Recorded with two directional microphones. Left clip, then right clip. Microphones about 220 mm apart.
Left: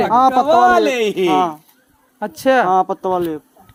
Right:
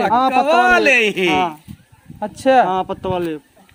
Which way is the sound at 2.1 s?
20° left (ahead or behind).